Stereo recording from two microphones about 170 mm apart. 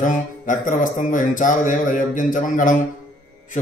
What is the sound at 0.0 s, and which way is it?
Mantra, 50° left (ahead or behind).